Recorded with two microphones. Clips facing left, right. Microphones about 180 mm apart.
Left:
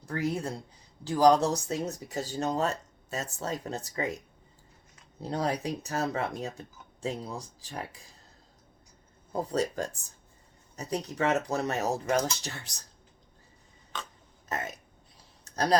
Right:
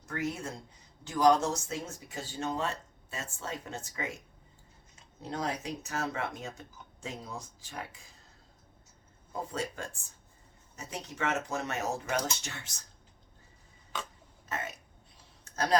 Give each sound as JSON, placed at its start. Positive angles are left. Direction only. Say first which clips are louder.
{"t": 0.0, "sound": "speech", "louder": "left 4 dB", "side_deg": 35}
{"t": 5.2, "sound": "speech", "louder": "left 5 dB", "side_deg": 35}
{"t": 9.3, "sound": "speech", "louder": "left 7 dB", "side_deg": 40}
{"t": 14.5, "sound": "speech", "louder": "left 3 dB", "side_deg": 40}